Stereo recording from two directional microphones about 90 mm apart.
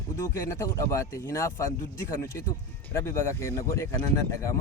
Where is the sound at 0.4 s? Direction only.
35° left (ahead or behind).